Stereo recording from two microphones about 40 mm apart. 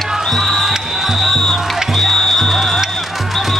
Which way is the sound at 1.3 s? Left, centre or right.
Centre.